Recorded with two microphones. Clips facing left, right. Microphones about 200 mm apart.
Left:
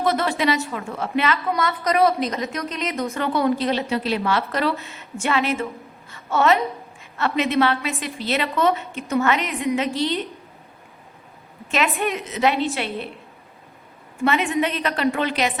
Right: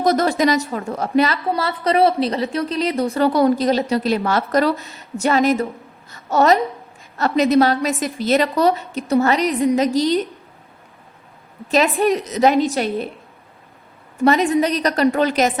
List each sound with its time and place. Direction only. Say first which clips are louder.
0.0 s a woman's voice: right 5 dB; 40° right (ahead or behind)
11.7 s a woman's voice: right 7 dB; 35° right (ahead or behind)
14.2 s a woman's voice: right 5 dB; 40° right (ahead or behind)